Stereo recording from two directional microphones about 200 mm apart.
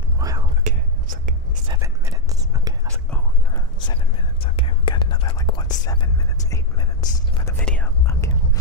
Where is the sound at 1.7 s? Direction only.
15° right (ahead or behind).